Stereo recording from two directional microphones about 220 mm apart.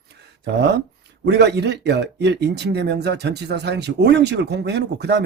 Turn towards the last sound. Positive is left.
turn(degrees=-50)  # may be behind; listen again after turning